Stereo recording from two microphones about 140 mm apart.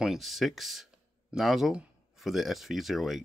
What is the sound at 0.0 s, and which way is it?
Speech, centre (ahead or behind).